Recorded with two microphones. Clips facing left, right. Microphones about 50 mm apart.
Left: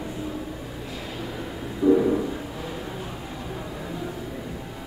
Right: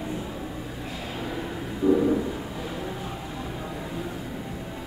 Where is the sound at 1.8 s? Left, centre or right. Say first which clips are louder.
Left 3 dB; right.